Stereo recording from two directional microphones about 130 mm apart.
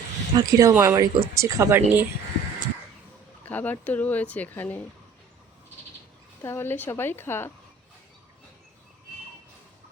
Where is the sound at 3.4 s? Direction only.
15° left (ahead or behind).